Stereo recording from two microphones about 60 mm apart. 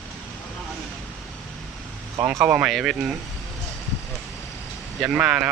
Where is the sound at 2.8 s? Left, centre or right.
Centre.